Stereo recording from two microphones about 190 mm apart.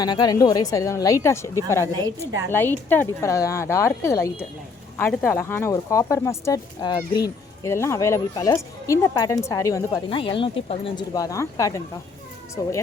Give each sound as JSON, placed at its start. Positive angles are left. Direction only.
{"t": 0.0, "sound": "speech", "side_deg": 20}
{"t": 1.9, "sound": "a woman's voice", "side_deg": -20}
{"t": 2.5, "sound": "speech", "side_deg": 10}